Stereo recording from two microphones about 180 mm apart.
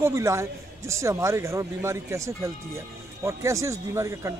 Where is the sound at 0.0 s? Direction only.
15° right (ahead or behind).